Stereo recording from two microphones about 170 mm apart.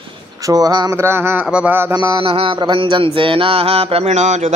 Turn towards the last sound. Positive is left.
turn(degrees=-45)  # may be behind; listen again after turning